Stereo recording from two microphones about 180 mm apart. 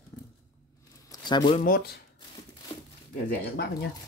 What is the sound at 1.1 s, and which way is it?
Speech, 25° left (ahead or behind).